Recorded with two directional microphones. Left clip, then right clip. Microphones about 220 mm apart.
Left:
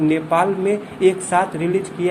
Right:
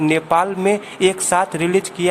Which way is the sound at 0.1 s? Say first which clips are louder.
Right 1 dB; 25° right (ahead or behind).